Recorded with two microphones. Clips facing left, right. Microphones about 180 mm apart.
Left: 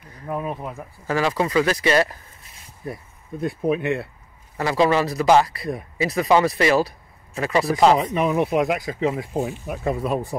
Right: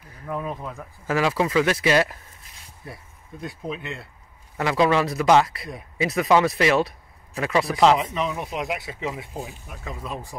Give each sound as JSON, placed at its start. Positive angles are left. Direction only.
{"t": 0.3, "sound": "speech", "side_deg": 15}
{"t": 1.0, "sound": "speech", "side_deg": -5}
{"t": 3.3, "sound": "speech", "side_deg": 55}
{"t": 4.6, "sound": "speech", "side_deg": 0}
{"t": 8.1, "sound": "speech", "side_deg": 55}